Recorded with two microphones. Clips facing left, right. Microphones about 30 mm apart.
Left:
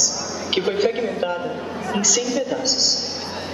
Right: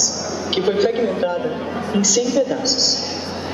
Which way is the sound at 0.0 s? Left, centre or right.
Centre.